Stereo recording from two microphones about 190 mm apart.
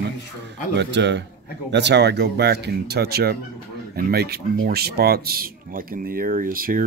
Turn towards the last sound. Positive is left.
turn(degrees=-50)  # may be behind; listen again after turning